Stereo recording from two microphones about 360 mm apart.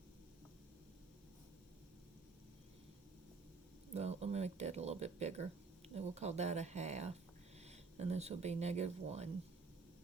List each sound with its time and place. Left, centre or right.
3.9 s speech: centre